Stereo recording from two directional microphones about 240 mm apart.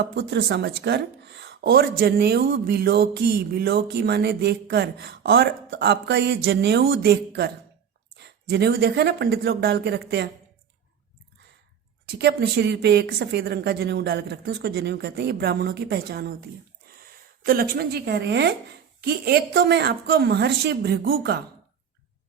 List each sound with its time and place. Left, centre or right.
0.0 s a woman's voice: right
12.0 s a woman's voice: right